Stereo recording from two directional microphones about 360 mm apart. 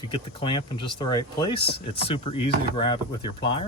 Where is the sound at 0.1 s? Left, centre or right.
Centre.